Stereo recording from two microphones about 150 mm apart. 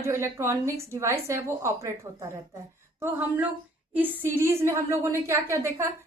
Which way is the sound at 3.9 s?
15° right (ahead or behind).